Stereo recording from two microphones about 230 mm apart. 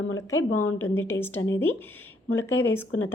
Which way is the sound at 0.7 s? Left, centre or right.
Centre.